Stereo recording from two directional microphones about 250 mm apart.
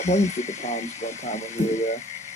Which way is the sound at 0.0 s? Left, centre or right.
Left.